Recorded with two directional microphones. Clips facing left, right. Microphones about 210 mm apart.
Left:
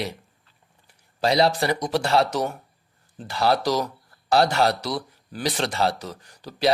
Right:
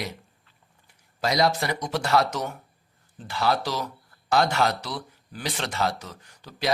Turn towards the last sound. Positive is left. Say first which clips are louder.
# left 5 dB
turn(degrees=35)  # may be behind; listen again after turning